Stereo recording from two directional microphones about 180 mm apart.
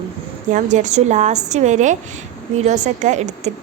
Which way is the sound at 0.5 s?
40° right (ahead or behind).